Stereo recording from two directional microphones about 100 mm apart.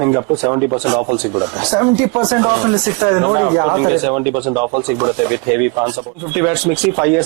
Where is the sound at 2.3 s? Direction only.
20° right (ahead or behind).